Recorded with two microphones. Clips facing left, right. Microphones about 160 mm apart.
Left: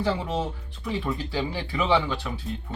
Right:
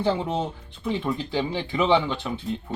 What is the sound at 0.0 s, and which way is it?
Speech, 25° right (ahead or behind).